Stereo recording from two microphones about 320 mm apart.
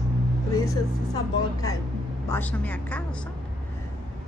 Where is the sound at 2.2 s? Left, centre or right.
Centre.